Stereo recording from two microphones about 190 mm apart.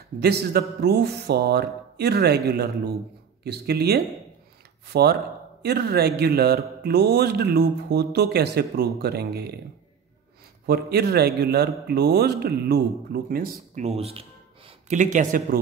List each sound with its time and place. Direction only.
0.2 s a man's voice: 55° right (ahead or behind)
10.7 s a man's voice: 55° right (ahead or behind); by 15.4 s 40° right (ahead or behind)